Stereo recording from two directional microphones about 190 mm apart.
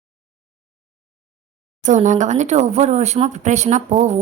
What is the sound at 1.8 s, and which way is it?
A woman's voice, 40° right (ahead or behind).